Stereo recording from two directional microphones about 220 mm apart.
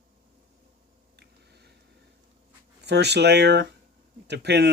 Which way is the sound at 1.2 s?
50° right (ahead or behind).